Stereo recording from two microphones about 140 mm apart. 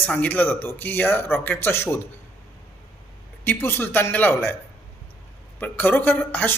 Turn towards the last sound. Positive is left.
turn(degrees=15)  # may be behind; listen again after turning